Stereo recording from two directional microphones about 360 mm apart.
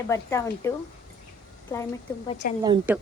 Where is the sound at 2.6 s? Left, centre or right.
Centre.